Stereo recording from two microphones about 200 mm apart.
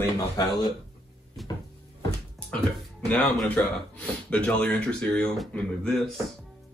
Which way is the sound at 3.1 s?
5° left (ahead or behind).